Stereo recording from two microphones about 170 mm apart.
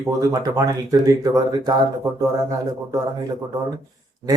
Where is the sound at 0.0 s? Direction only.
20° right (ahead or behind).